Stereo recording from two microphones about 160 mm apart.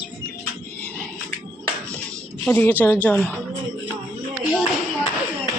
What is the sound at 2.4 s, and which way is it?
Speech, 15° left (ahead or behind).